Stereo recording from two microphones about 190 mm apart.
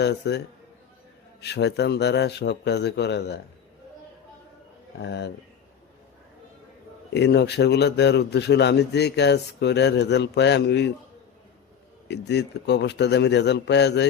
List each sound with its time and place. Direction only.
0.0 s a man's voice: 60° left (ahead or behind)
5.0 s a man's voice: 65° left (ahead or behind)
7.1 s a man's voice: 60° left (ahead or behind)
12.0 s a man's voice: 65° left (ahead or behind)